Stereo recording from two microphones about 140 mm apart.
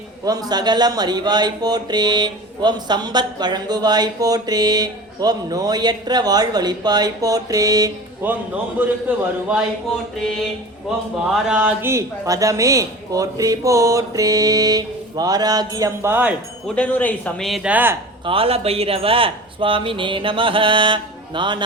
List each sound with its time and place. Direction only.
0.3 s speech: 25° right (ahead or behind)
8.2 s a man's voice: 15° right (ahead or behind)
11.4 s speech: 10° right (ahead or behind)
16.6 s a man's voice: 10° left (ahead or behind); by 17.9 s 10° right (ahead or behind)
18.3 s a man's voice: 40° right (ahead or behind)